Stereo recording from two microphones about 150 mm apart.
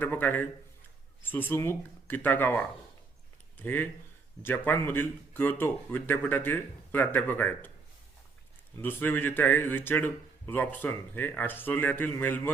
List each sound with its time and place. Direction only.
0.0 s speech: 15° left (ahead or behind)
8.7 s speech: 15° left (ahead or behind)